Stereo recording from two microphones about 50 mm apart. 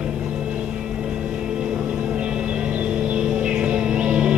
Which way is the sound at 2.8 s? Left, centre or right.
Right.